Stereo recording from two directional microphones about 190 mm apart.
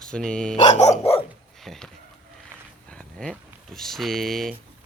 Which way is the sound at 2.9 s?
5° left (ahead or behind).